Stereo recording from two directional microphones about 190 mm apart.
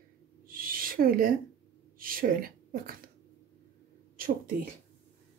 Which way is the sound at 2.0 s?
50° right (ahead or behind).